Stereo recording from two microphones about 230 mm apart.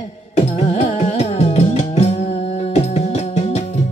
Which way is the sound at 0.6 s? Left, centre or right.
Left.